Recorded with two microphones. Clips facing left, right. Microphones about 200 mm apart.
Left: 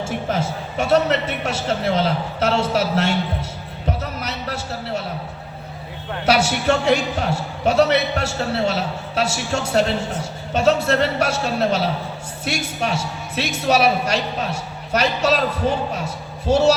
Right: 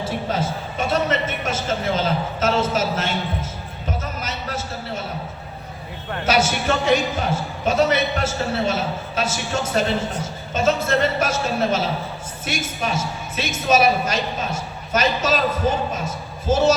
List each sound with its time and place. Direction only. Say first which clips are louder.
0.8 s a woman's voice: left 4 dB; 65° left (ahead or behind)
3.8 s a sound: left 3 dB; 65° left (ahead or behind)
6.2 s a man's voice: left 2 dB; 70° left (ahead or behind)